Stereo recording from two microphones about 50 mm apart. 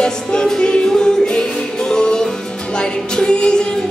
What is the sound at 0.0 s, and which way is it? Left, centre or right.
Music, centre.